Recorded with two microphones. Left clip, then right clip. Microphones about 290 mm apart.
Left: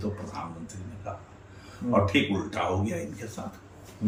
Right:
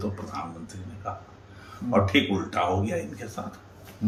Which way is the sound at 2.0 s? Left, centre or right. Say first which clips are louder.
Right 2 dB; centre.